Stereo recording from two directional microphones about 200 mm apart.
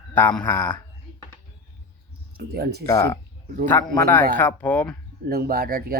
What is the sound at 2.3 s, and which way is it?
Speech, 50° right (ahead or behind).